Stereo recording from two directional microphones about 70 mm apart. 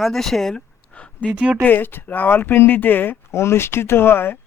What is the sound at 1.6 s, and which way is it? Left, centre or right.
Speech, left.